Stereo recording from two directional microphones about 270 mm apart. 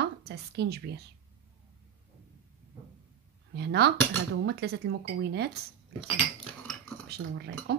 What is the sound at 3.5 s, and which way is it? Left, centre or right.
Speech, right.